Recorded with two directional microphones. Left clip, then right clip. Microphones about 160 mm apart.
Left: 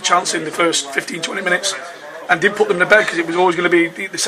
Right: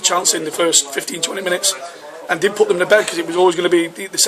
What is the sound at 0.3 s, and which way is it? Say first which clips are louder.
A man's voice: even; 35° right (ahead or behind).